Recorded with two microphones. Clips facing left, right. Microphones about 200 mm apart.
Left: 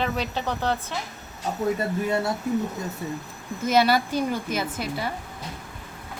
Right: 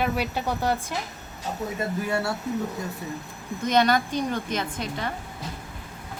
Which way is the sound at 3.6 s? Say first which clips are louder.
Left 1 dB; 5° left (ahead or behind).